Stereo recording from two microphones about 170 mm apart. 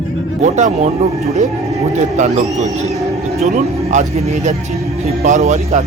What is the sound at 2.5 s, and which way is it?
Speech, 40° right (ahead or behind).